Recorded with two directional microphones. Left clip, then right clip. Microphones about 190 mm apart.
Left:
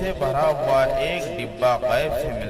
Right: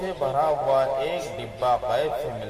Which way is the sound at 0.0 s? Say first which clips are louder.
Left 3 dB; 40° left (ahead or behind).